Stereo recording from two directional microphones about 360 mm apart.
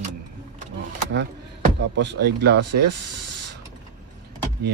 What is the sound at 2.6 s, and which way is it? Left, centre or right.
Speech, right.